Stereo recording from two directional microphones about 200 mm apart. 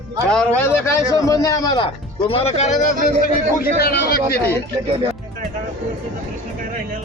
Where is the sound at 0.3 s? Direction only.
5° left (ahead or behind); by 4.4 s 50° left (ahead or behind).